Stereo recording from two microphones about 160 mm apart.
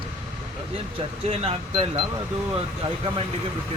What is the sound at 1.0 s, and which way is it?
Speech, 35° right (ahead or behind).